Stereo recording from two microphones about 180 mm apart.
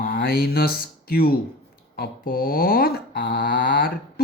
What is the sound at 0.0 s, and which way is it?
Speech, 60° left (ahead or behind).